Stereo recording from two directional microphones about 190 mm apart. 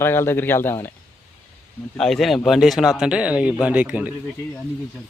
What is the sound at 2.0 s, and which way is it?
Speech, centre (ahead or behind).